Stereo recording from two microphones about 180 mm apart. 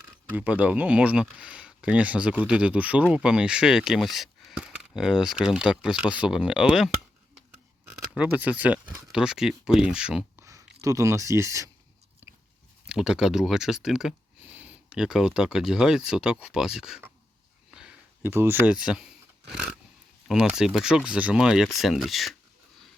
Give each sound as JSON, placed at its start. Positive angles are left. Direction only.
{"t": 0.3, "sound": "speech", "side_deg": -10}
{"t": 8.1, "sound": "speech", "side_deg": -10}
{"t": 10.4, "sound": "speech", "side_deg": -15}
{"t": 12.2, "sound": "biting", "side_deg": -10}
{"t": 12.9, "sound": "speech", "side_deg": -5}